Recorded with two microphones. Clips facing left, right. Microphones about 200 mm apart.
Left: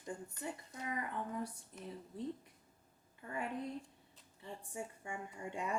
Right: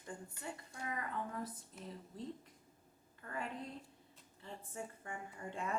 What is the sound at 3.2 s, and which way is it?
Speech, 15° left (ahead or behind).